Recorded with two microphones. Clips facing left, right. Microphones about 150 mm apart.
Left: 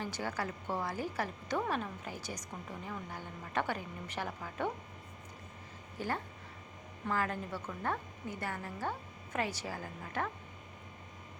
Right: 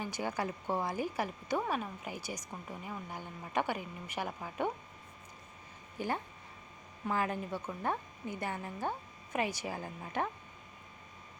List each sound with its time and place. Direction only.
0.0 s a woman's voice: 15° right (ahead or behind)
6.0 s a woman's voice: 15° right (ahead or behind)